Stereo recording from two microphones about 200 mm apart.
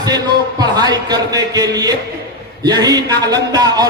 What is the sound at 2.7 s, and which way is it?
A man's voice, 20° right (ahead or behind).